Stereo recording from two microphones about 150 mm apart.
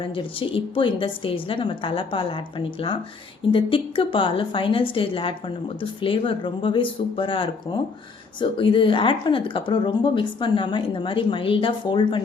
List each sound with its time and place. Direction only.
0.0 s a woman's voice: 35° left (ahead or behind)